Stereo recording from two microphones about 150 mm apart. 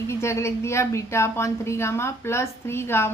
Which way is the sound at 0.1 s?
20° left (ahead or behind).